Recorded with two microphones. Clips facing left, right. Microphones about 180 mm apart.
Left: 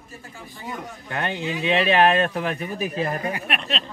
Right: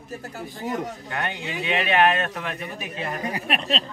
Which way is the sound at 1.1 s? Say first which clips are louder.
Left 6 dB; 30° left (ahead or behind).